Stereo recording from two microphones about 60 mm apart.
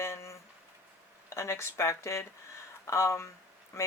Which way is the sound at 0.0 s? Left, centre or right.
Left.